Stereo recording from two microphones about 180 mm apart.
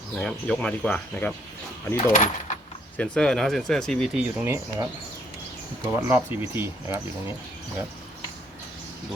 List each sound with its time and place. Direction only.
0.2 s speech: 5° left (ahead or behind)
2.1 s speech: 45° left (ahead or behind)
3.0 s speech: 5° left (ahead or behind); by 7.3 s 15° right (ahead or behind)